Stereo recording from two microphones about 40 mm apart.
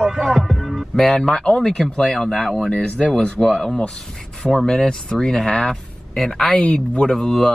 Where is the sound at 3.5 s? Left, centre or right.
Left.